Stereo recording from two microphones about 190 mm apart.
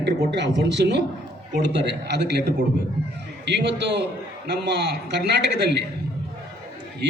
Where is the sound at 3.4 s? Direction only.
65° right (ahead or behind).